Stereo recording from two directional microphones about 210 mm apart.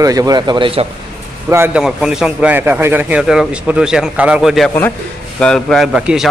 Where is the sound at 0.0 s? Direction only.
15° right (ahead or behind).